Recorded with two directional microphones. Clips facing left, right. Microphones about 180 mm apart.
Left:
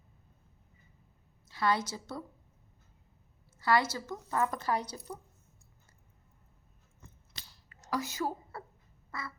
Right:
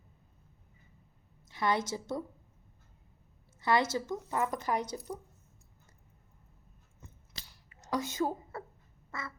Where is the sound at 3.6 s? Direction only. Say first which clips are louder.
Even; 20° right (ahead or behind).